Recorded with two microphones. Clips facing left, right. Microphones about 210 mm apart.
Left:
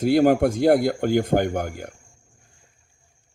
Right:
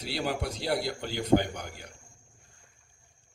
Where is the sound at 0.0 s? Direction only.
50° left (ahead or behind).